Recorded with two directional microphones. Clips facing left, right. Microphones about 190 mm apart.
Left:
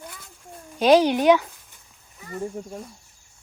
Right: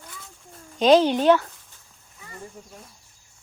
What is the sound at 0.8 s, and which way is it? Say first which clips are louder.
Speech: even; 10° left (ahead or behind).